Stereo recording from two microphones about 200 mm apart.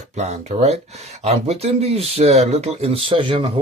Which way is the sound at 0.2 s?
35° right (ahead or behind).